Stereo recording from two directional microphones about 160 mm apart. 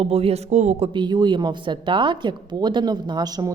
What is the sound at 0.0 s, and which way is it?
Speech, 40° right (ahead or behind).